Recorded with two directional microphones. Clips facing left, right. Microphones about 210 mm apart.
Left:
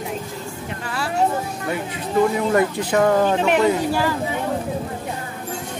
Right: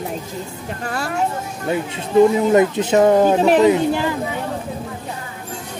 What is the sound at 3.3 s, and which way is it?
Speech, 35° right (ahead or behind).